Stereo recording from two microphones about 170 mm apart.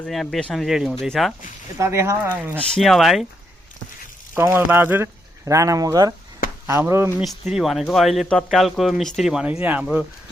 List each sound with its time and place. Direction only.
0.0 s speech: centre (ahead or behind)
1.8 s speech: 15° right (ahead or behind)
2.6 s speech: 5° left (ahead or behind)
4.4 s speech: 15° right (ahead or behind)
7.2 s speech: centre (ahead or behind)